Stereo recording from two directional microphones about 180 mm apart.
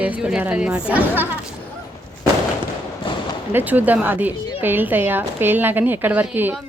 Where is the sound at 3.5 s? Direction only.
10° right (ahead or behind).